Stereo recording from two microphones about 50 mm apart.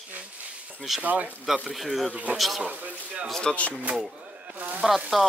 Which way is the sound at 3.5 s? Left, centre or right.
Centre.